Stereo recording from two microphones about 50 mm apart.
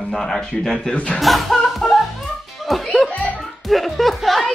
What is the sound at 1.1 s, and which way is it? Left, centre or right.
Music, centre.